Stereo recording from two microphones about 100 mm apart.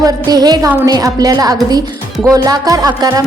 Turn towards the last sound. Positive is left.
turn(degrees=-40)  # may be behind; listen again after turning